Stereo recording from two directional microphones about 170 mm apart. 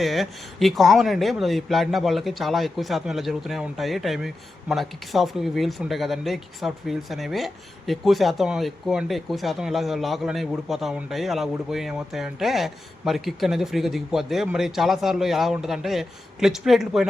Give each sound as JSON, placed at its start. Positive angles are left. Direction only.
{"t": 0.0, "sound": "speech", "side_deg": 0}